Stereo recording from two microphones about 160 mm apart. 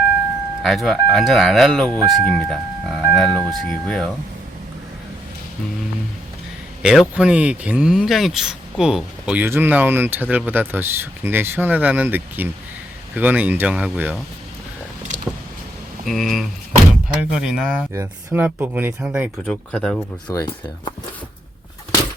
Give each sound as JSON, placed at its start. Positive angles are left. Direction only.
{"t": 0.6, "sound": "speech", "side_deg": 0}
{"t": 6.8, "sound": "speech", "side_deg": -5}
{"t": 16.0, "sound": "speech", "side_deg": 0}
{"t": 17.9, "sound": "speech", "side_deg": -15}
{"t": 19.5, "sound": "speech", "side_deg": 5}
{"t": 20.3, "sound": "speech", "side_deg": 25}